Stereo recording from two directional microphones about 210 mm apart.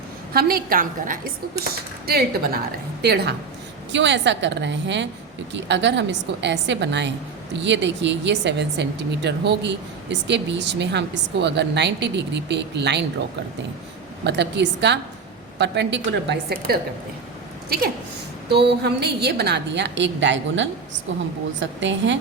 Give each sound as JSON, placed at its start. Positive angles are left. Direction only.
{"t": 0.3, "sound": "a woman's voice", "side_deg": -45}
{"t": 14.3, "sound": "a woman's voice", "side_deg": -55}
{"t": 18.5, "sound": "a woman's voice", "side_deg": -50}